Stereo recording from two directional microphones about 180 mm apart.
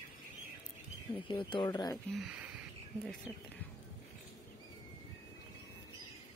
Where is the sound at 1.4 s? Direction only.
25° left (ahead or behind).